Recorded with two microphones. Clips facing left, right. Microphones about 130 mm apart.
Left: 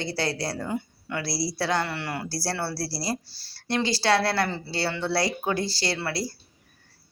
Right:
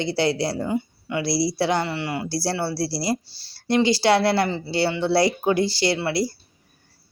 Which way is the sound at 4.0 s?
25° right (ahead or behind).